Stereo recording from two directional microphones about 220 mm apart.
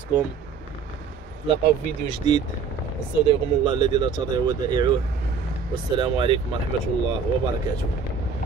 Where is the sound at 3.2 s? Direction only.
20° right (ahead or behind).